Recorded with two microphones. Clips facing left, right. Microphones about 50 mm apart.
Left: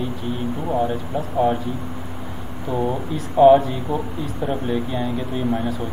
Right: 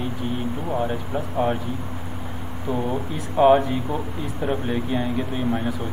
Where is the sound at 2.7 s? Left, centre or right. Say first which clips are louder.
Left 2 dB; right.